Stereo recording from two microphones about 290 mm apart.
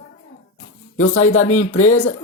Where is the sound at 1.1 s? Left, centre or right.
Left.